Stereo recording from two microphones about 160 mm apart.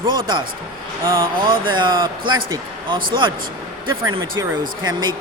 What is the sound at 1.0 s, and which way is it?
Speech, 15° right (ahead or behind).